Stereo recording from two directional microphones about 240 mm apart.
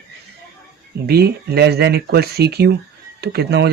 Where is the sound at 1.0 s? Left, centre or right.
Right.